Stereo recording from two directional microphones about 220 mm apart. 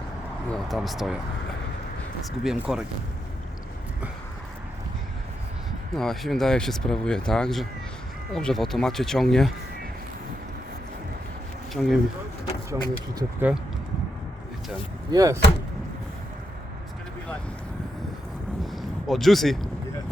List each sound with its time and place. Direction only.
0.5 s speech: centre (ahead or behind)
2.4 s speech: centre (ahead or behind)
6.0 s speech: centre (ahead or behind)
11.7 s speech: centre (ahead or behind)
12.7 s speech: 15° right (ahead or behind)
15.1 s speech: 15° right (ahead or behind)
18.6 s a sound: centre (ahead or behind)